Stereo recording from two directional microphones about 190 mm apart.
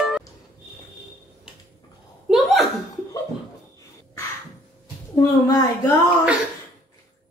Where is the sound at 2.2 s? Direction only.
Centre (ahead or behind).